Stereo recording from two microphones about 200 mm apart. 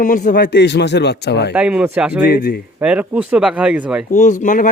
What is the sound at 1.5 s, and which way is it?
Speech, 5° right (ahead or behind).